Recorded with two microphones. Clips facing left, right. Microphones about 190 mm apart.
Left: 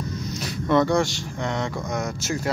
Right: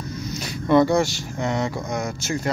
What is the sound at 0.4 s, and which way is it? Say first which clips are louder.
Speech: right 3 dB; centre (ahead or behind).